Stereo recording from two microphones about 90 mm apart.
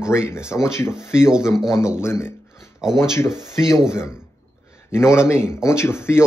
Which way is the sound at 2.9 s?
30° left (ahead or behind).